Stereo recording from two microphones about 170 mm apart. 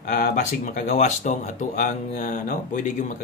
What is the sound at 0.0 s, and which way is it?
A man's voice, 55° left (ahead or behind).